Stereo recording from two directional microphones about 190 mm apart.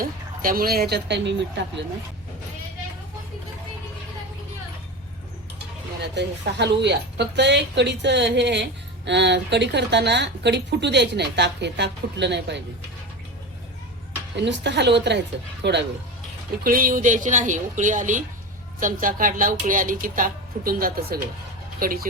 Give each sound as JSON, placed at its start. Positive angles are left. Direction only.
{"t": 0.0, "sound": "a woman's voice", "side_deg": -50}
{"t": 6.0, "sound": "a woman's voice", "side_deg": -65}
{"t": 14.3, "sound": "a woman's voice", "side_deg": -65}
{"t": 16.6, "sound": "a woman's voice", "side_deg": -50}